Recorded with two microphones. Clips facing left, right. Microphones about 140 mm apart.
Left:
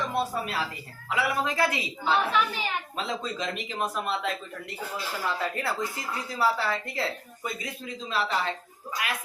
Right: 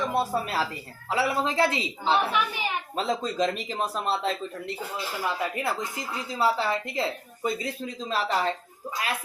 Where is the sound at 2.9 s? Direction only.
35° right (ahead or behind).